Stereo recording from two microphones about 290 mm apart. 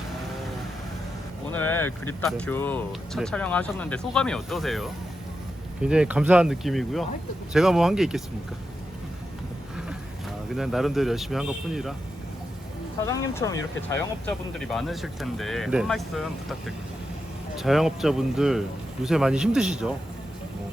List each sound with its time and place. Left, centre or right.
1.5 s speech: centre
10.5 s speech: centre
13.1 s speech: centre